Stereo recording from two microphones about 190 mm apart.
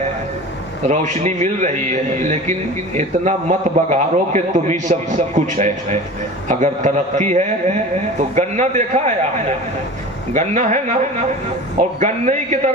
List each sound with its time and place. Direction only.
0.9 s a man's voice: 40° right (ahead or behind)